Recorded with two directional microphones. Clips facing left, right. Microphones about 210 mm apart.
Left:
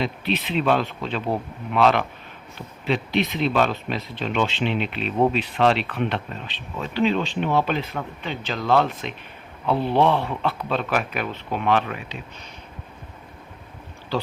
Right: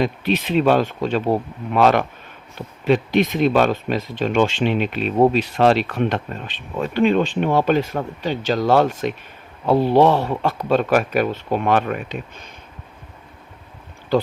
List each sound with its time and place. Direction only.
0.0 s speech: 45° right (ahead or behind)